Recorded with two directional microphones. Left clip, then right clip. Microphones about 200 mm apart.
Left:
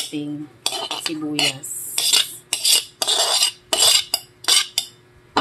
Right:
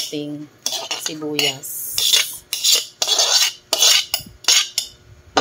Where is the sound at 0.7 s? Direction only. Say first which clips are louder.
Right 2 dB; 5° right (ahead or behind).